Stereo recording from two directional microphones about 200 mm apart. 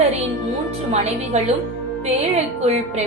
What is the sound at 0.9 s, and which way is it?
A woman's voice, 35° right (ahead or behind).